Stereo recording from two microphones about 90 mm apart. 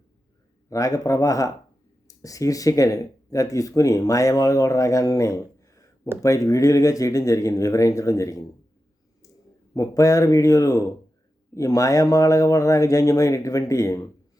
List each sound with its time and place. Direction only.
0.7 s speech: 40° left (ahead or behind)
9.7 s speech: 40° left (ahead or behind)